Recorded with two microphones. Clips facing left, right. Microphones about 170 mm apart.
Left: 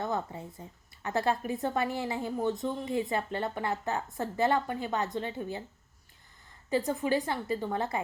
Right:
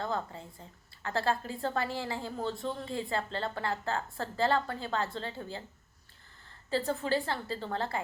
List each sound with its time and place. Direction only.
0.0 s speech: 20° left (ahead or behind)
6.7 s a woman's voice: 15° left (ahead or behind)